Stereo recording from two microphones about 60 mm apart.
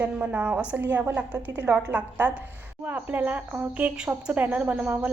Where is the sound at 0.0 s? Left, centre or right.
Right.